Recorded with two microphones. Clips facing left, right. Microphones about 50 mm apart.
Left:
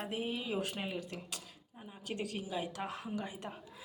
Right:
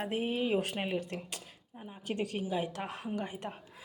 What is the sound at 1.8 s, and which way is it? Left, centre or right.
A woman's voice, right.